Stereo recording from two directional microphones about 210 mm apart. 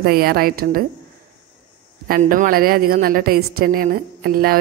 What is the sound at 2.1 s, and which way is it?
A woman's voice, 40° right (ahead or behind).